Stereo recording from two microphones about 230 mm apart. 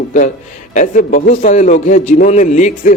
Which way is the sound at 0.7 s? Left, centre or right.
Left.